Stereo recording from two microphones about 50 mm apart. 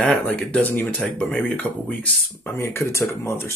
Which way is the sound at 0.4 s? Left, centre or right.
Left.